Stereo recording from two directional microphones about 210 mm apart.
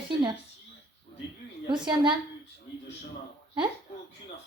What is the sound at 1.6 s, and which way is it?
Speech, 20° right (ahead or behind).